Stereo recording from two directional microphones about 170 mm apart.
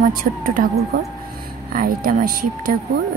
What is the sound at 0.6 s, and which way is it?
A woman's voice, 55° right (ahead or behind).